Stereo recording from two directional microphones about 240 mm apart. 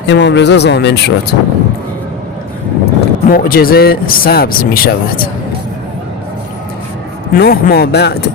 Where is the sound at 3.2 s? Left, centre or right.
Left.